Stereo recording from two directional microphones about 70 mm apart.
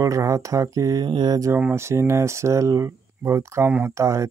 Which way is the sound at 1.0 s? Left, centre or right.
Right.